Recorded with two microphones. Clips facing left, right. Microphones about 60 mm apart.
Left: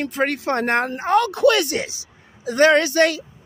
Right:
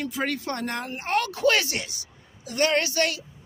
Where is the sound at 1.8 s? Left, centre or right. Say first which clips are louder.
Left 8 dB; left.